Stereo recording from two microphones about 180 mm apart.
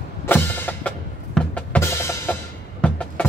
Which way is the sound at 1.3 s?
5° left (ahead or behind).